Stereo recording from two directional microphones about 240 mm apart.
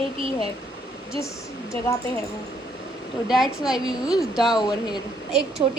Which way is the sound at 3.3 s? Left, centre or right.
Centre.